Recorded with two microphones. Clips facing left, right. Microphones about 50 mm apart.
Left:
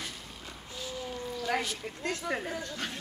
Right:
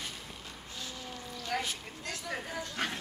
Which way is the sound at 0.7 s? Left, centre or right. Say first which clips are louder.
Left 6 dB; centre.